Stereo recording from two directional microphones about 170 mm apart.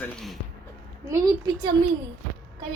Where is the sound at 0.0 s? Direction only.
Centre (ahead or behind).